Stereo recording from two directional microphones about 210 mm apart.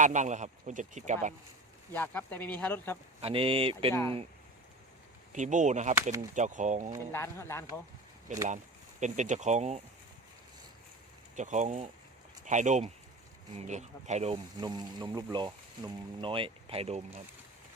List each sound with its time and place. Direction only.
0.0 s speech: 35° right (ahead or behind)
1.9 s speech: 10° left (ahead or behind)
3.2 s speech: 25° right (ahead or behind)
5.3 s speech: 35° right (ahead or behind)
5.9 s speech: 15° right (ahead or behind)
6.3 s speech: 35° right (ahead or behind)
7.1 s speech: 10° left (ahead or behind)
8.4 s speech: 35° right (ahead or behind)
11.3 s speech: 35° right (ahead or behind)
14.6 s speech: 20° right (ahead or behind)